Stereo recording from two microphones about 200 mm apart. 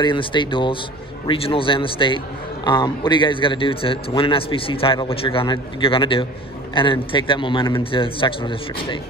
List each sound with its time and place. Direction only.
0.0 s a man's voice: 25° left (ahead or behind)